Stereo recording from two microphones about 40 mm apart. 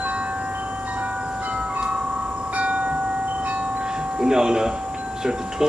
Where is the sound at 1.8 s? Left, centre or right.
Right.